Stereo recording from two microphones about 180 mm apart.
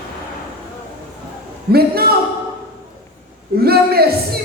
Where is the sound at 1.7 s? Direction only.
60° right (ahead or behind).